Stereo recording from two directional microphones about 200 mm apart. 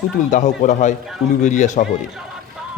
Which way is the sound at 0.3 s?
40° left (ahead or behind).